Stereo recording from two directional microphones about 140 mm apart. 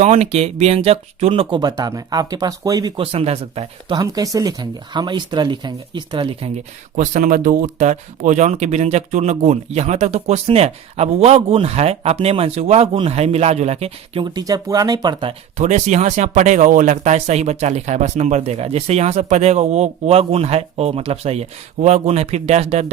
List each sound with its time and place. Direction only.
0.0 s speech: 50° right (ahead or behind); by 2.9 s 25° right (ahead or behind)
3.0 s speech: 45° right (ahead or behind)
3.9 s speech: 25° right (ahead or behind)
6.9 s speech: 65° right (ahead or behind)
7.8 s speech: 60° right (ahead or behind)
14.3 s speech: 25° right (ahead or behind)
15.5 s speech: 60° right (ahead or behind)